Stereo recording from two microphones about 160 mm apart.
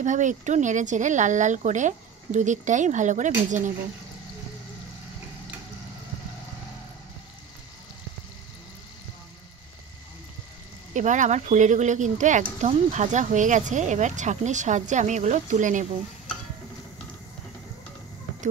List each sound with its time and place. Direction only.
0.0 s speech: 50° right (ahead or behind)
10.9 s speech: 50° right (ahead or behind)